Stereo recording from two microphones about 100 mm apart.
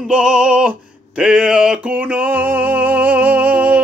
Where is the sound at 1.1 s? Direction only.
10° right (ahead or behind).